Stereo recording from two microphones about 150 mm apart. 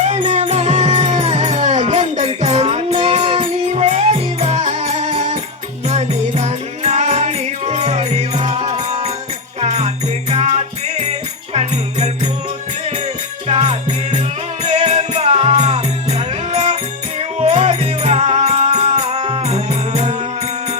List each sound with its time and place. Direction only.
0.0 s music: 50° right (ahead or behind)
13.5 s music: 40° right (ahead or behind)